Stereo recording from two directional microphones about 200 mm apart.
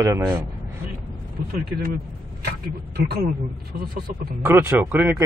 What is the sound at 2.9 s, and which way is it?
Speech, 55° right (ahead or behind).